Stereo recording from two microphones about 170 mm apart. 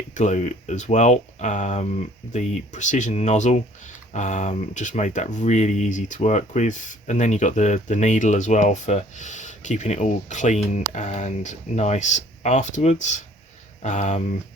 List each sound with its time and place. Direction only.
0.1 s speech: 45° left (ahead or behind)